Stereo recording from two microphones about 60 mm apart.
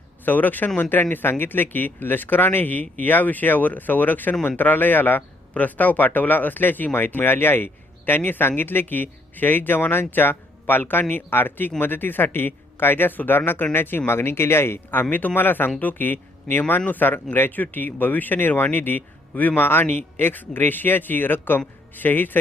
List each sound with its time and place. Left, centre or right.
0.3 s a man's voice: left